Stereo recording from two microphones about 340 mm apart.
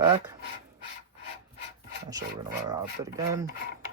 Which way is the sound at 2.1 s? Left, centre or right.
Centre.